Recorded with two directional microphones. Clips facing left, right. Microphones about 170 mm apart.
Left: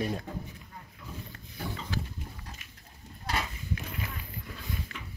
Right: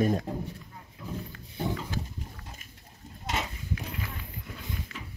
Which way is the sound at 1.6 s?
20° right (ahead or behind).